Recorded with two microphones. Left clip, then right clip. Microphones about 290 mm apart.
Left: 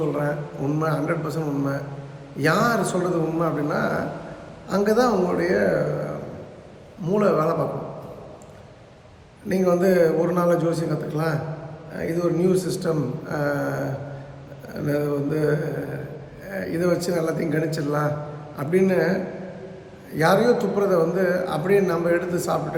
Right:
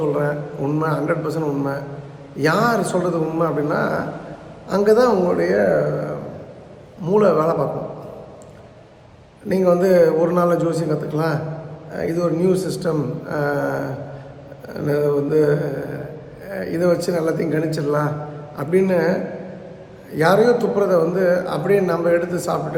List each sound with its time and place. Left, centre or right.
0.2 s a man's voice: centre
7.0 s a man's voice: centre
9.5 s a man's voice: centre